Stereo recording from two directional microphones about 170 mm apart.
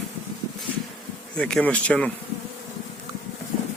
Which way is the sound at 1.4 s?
5° left (ahead or behind).